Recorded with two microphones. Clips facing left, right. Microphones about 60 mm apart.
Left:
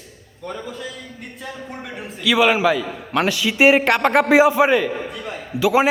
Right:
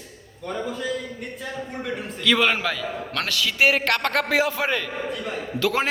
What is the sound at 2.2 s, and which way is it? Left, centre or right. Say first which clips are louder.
A man's voice: left 5 dB; centre.